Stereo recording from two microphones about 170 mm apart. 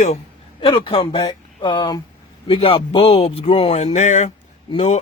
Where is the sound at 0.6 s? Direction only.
30° left (ahead or behind).